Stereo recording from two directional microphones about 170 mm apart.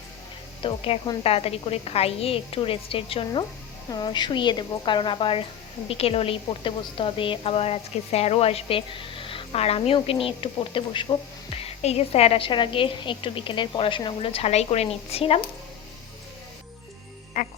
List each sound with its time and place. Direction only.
0.6 s a woman's voice: 30° left (ahead or behind)
17.4 s music: 50° left (ahead or behind)